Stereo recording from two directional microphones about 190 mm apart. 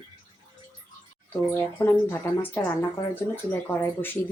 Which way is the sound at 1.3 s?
10° left (ahead or behind).